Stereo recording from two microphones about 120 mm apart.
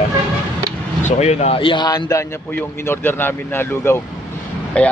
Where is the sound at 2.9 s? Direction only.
15° left (ahead or behind).